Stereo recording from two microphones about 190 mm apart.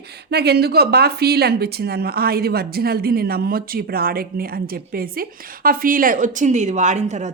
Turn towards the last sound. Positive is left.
turn(degrees=-40)  # may be behind; listen again after turning